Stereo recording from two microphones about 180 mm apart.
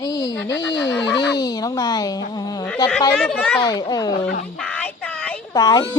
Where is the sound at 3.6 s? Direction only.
20° left (ahead or behind).